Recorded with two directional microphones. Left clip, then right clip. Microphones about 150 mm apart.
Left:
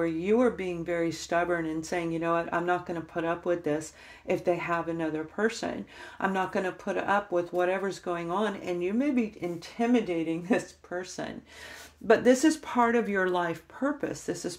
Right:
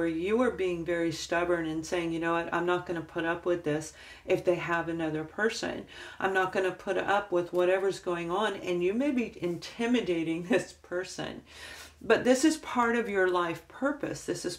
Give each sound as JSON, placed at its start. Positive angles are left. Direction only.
{"t": 0.0, "sound": "speech", "side_deg": 30}